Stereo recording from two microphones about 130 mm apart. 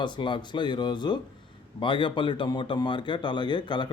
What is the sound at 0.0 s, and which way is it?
Speech, 40° left (ahead or behind).